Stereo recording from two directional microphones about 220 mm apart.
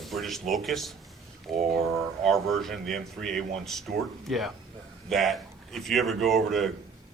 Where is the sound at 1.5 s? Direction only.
30° right (ahead or behind).